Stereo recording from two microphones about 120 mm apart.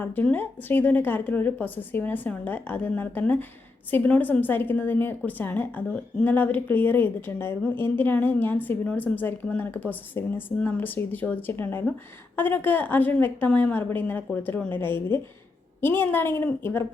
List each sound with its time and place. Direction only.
0.0 s a woman's voice: 15° left (ahead or behind)